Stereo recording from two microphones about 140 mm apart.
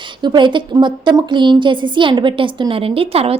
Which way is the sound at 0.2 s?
35° right (ahead or behind).